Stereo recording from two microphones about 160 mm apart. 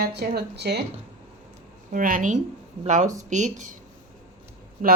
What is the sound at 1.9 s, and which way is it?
Speech, 60° right (ahead or behind).